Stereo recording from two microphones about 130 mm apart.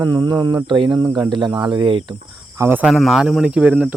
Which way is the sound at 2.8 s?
Centre (ahead or behind).